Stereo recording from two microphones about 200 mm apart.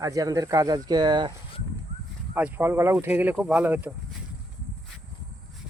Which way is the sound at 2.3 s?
10° right (ahead or behind).